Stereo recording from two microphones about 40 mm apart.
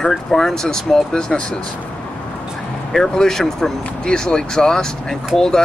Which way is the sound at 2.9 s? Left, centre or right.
Centre.